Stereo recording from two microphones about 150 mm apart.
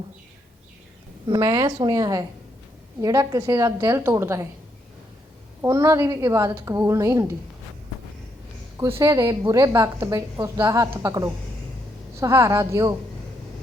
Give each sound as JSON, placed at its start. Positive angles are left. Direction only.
{"t": 1.3, "sound": "a woman's voice", "side_deg": -20}
{"t": 5.6, "sound": "a woman's voice", "side_deg": -20}
{"t": 8.8, "sound": "a woman's voice", "side_deg": -20}